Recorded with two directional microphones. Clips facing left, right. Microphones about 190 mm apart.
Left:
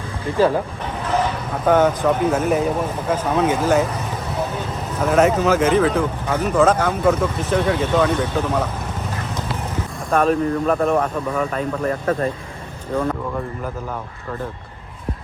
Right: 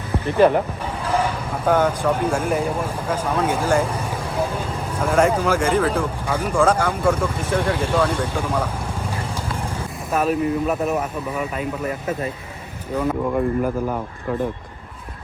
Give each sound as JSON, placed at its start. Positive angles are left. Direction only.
{"t": 0.3, "sound": "speech", "side_deg": -20}
{"t": 1.0, "sound": "vehicle", "side_deg": -10}
{"t": 1.9, "sound": "speech", "side_deg": -10}
{"t": 2.3, "sound": "speech", "side_deg": 5}
{"t": 2.6, "sound": "speech", "side_deg": -10}
{"t": 3.1, "sound": "speech", "side_deg": 10}
{"t": 3.4, "sound": "speech", "side_deg": -10}
{"t": 3.9, "sound": "vehicle", "side_deg": -10}
{"t": 5.3, "sound": "speech", "side_deg": -10}
{"t": 9.7, "sound": "speech", "side_deg": -5}